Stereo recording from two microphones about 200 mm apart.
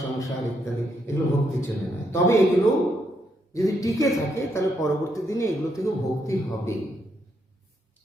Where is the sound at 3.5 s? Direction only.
15° left (ahead or behind).